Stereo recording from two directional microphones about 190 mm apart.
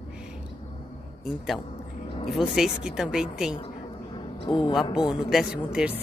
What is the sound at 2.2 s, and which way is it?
Speech, centre (ahead or behind).